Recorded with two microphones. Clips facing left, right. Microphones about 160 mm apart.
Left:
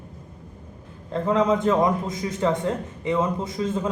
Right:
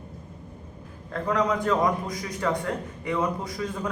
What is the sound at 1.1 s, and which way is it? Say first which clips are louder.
A man's voice: left 4 dB; 25° left (ahead or behind).